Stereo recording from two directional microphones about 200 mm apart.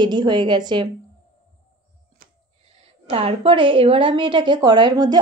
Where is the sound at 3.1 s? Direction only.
30° right (ahead or behind).